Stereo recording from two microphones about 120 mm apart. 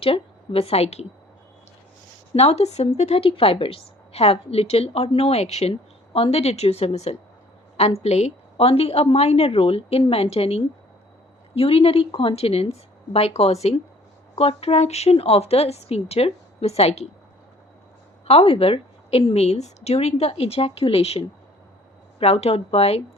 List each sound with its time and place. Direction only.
0.0 s a woman's voice: 50° left (ahead or behind)
2.3 s speech: 60° left (ahead or behind)
18.3 s speech: 55° left (ahead or behind)